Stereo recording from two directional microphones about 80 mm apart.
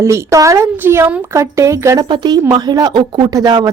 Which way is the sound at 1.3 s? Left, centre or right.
Right.